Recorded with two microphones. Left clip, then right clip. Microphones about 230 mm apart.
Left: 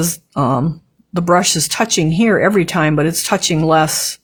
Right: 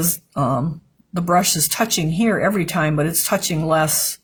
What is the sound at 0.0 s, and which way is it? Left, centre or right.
Speech, left.